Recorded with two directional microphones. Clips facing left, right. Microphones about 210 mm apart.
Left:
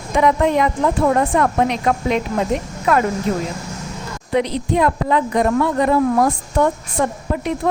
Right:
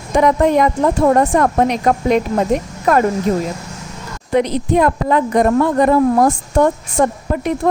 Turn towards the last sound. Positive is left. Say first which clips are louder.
# right 4 dB
turn(degrees=-45)  # may be behind; listen again after turning